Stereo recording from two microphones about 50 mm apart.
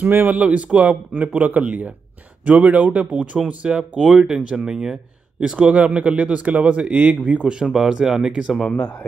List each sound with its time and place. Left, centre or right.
0.0 s speech: right
0.4 s speech: right
3.1 s speech: centre
8.7 s speech: left